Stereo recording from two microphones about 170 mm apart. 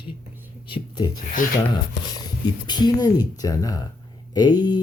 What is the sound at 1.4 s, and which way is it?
Speech, 50° left (ahead or behind).